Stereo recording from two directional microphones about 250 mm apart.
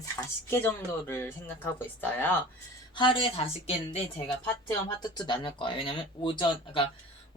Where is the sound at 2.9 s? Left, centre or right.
Centre.